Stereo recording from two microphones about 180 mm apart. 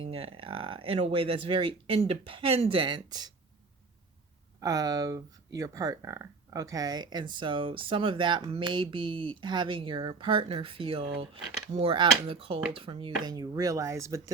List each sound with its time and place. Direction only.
0.1 s speech: 30° right (ahead or behind)
4.6 s speech: 20° right (ahead or behind)